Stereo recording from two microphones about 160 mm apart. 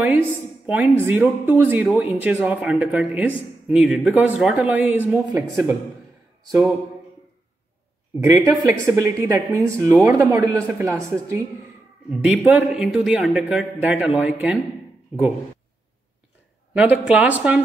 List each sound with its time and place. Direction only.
0.7 s speech: 10° right (ahead or behind)
8.2 s speech: 15° right (ahead or behind)
16.7 s speech: 10° right (ahead or behind)